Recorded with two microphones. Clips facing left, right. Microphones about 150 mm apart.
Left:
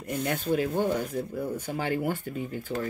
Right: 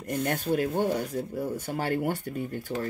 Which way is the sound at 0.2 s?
50° right (ahead or behind).